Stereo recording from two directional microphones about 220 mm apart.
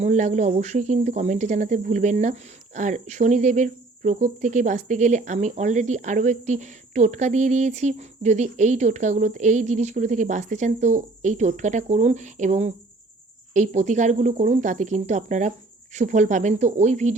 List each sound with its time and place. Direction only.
0.0 s speech: 30° right (ahead or behind)